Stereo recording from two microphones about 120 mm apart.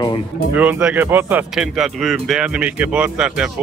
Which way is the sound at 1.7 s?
5° right (ahead or behind).